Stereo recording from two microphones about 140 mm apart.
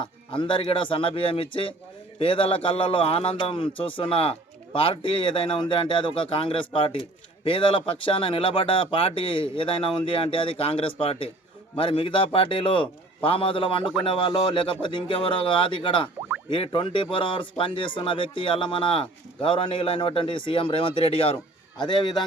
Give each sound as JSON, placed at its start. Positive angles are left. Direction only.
{"t": 0.0, "sound": "speech", "side_deg": 35}